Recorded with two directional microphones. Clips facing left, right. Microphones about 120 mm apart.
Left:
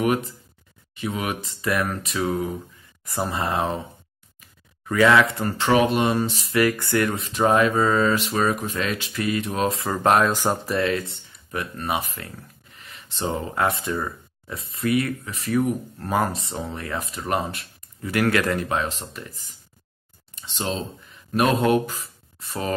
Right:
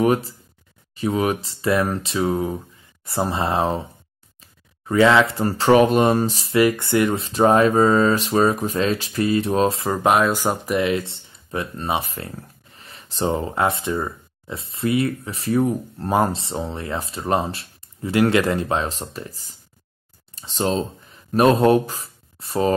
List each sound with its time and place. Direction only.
0.0 s speech: 35° right (ahead or behind)
4.4 s a sound: 25° right (ahead or behind)
5.4 s speech: 35° right (ahead or behind)
6.5 s speech: 25° right (ahead or behind)
9.9 s speech: 5° right (ahead or behind); by 22.8 s 30° right (ahead or behind)